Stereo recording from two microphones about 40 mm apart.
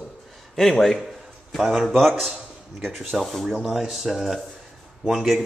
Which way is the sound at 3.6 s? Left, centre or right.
Centre.